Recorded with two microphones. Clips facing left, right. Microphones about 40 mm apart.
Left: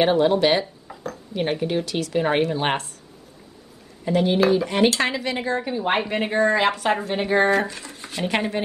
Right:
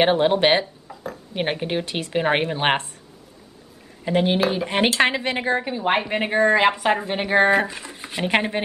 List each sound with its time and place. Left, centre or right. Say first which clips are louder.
0.0 s speech: even; right
0.9 s a sound: even; centre
1.3 s speech: left 1 dB; right
4.0 s speech: left 1 dB; right
5.6 s a woman's voice: right 1 dB; centre